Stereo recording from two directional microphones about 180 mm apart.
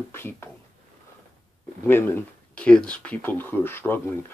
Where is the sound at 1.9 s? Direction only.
10° left (ahead or behind).